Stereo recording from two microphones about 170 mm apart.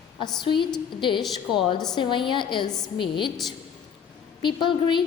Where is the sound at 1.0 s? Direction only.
30° left (ahead or behind).